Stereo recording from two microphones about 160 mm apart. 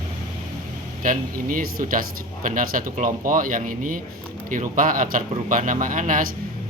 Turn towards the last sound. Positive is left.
turn(degrees=-55)  # may be behind; listen again after turning